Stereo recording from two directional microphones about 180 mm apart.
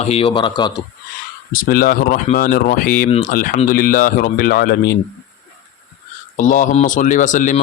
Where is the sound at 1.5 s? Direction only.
50° left (ahead or behind).